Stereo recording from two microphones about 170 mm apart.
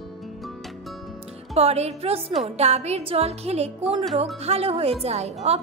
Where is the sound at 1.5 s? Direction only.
40° right (ahead or behind).